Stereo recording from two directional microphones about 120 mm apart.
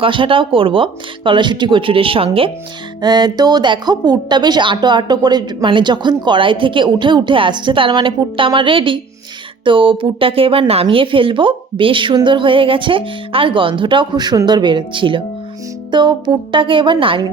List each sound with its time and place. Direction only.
0.0 s speech: 45° right (ahead or behind)
3.0 s a woman's voice: 35° right (ahead or behind)